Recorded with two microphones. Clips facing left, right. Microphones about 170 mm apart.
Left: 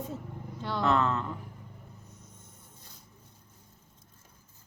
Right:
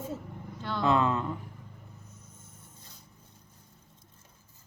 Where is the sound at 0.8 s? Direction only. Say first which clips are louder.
Right 1 dB; 15° right (ahead or behind).